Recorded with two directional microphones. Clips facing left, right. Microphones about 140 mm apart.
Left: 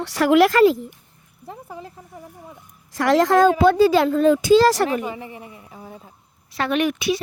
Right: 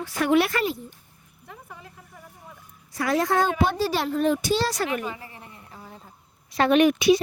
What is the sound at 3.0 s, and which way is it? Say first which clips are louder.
Speech: left 7 dB; 90° left.